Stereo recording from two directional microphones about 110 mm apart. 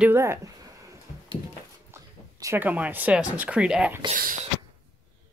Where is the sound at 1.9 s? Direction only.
25° right (ahead or behind).